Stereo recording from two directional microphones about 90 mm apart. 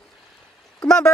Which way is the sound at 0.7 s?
10° left (ahead or behind).